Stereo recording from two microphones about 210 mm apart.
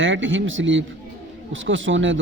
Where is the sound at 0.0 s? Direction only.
65° right (ahead or behind).